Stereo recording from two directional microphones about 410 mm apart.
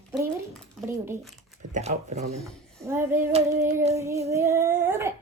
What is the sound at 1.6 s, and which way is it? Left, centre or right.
Child singing, centre.